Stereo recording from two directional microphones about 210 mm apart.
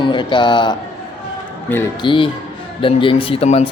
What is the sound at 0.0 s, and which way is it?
A man's voice, 20° left (ahead or behind).